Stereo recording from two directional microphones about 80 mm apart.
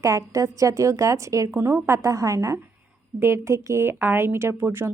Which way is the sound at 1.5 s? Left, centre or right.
Right.